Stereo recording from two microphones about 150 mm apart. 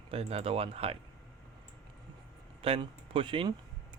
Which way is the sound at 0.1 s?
40° right (ahead or behind).